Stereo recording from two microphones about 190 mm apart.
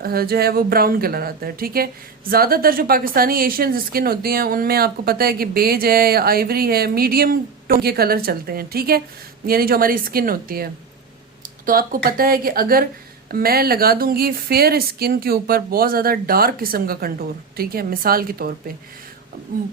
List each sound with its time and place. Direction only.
0.0 s a woman's voice: 55° right (ahead or behind)